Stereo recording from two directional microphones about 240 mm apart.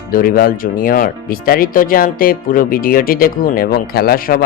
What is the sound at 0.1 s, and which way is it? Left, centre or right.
Speech, left.